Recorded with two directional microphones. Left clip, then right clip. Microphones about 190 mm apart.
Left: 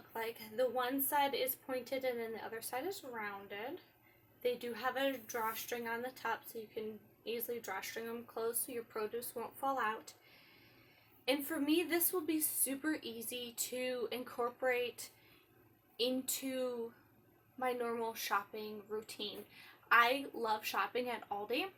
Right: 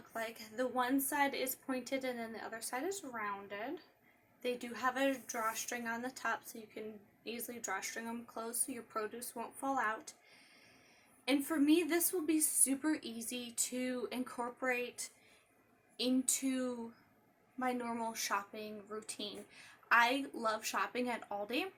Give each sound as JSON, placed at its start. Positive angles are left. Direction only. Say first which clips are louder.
{"t": 0.1, "sound": "a woman's voice", "louder": "even", "side_deg": -15}
{"t": 11.3, "sound": "a woman's voice", "louder": "right 3 dB", "side_deg": -15}